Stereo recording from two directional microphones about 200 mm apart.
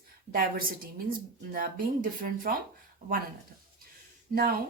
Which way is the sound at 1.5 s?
45° right (ahead or behind).